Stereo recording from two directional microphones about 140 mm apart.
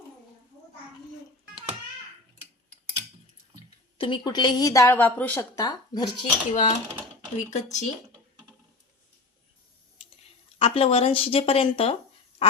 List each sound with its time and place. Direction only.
3.9 s a woman's voice: 35° left (ahead or behind); by 5.5 s 10° left (ahead or behind)
5.5 s a woman's voice: 30° left (ahead or behind)
6.5 s speech: 60° left (ahead or behind)
10.6 s speech: 45° left (ahead or behind)